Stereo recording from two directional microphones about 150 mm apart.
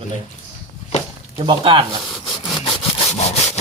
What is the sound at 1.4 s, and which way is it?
Speech, 35° right (ahead or behind).